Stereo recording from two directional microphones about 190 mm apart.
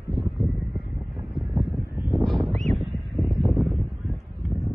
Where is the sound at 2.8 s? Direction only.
Centre (ahead or behind).